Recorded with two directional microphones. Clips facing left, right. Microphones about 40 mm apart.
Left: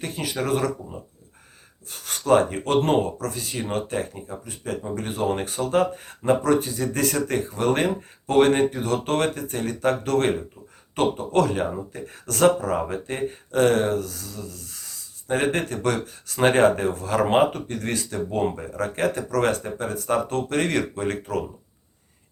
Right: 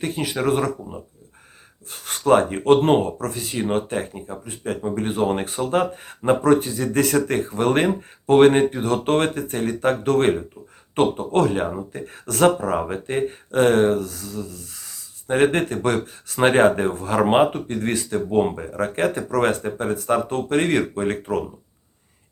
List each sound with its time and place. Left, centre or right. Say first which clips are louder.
0.0 s speech: right 5 dB; right